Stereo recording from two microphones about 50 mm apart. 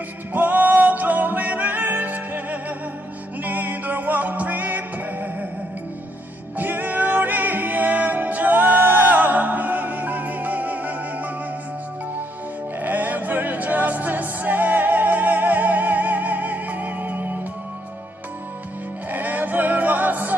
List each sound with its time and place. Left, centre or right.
0.3 s music: right
6.6 s music: right
12.8 s music: right
19.0 s music: right